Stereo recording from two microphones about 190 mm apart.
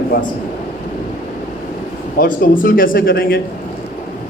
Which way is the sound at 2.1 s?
50° left (ahead or behind).